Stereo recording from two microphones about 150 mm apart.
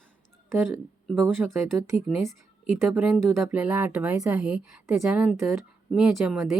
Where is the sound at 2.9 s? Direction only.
5° right (ahead or behind).